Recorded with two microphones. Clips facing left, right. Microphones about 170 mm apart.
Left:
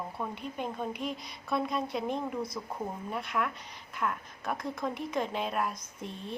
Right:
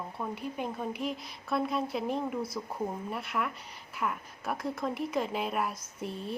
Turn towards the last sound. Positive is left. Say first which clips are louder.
# right 3 dB
turn(degrees=-5)  # may be behind; listen again after turning